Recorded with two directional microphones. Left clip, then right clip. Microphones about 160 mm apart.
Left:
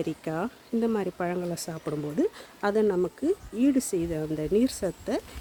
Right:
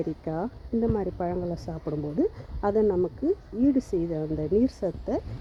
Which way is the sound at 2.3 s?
5° left (ahead or behind).